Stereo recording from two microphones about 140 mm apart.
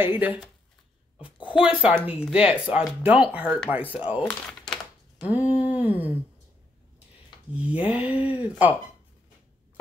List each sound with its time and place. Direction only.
0.0 s a woman's voice: 10° right (ahead or behind)
4.2 s speech: 5° left (ahead or behind)
5.3 s a sound: 10° right (ahead or behind)
7.6 s speech: 10° right (ahead or behind)